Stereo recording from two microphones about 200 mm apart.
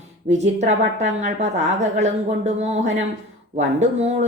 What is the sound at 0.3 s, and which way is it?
A woman's voice, 35° right (ahead or behind).